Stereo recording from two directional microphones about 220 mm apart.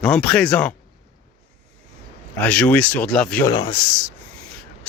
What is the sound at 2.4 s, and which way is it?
Speech, 5° left (ahead or behind).